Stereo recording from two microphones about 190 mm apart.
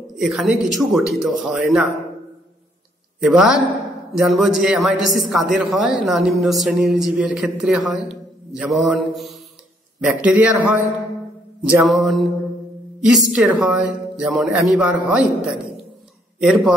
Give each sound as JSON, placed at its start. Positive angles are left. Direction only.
{"t": 0.1, "sound": "a woman's voice", "side_deg": 0}
{"t": 3.2, "sound": "a woman's voice", "side_deg": -5}